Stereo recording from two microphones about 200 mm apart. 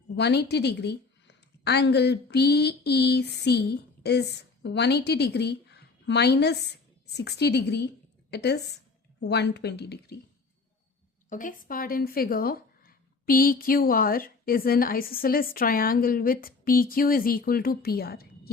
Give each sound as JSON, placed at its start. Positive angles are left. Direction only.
{"t": 0.2, "sound": "a woman's voice", "side_deg": 55}
{"t": 11.3, "sound": "speech", "side_deg": 40}